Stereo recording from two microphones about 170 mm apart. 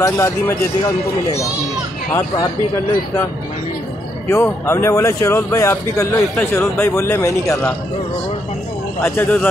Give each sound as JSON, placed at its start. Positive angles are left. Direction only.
{"t": 0.0, "sound": "speech", "side_deg": 15}
{"t": 4.3, "sound": "speech", "side_deg": 15}
{"t": 9.0, "sound": "speech", "side_deg": 15}